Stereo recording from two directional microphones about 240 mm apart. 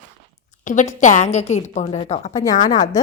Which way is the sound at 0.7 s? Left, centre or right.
Left.